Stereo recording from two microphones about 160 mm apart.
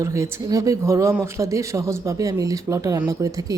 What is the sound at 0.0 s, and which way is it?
Speech, 20° right (ahead or behind).